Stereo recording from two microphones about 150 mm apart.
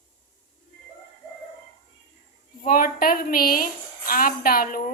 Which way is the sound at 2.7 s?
70° left (ahead or behind).